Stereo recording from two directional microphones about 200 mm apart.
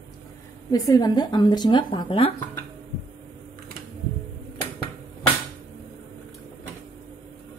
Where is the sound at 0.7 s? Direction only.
15° left (ahead or behind).